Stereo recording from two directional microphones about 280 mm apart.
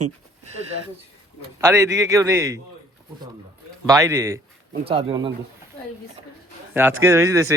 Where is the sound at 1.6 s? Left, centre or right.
Centre.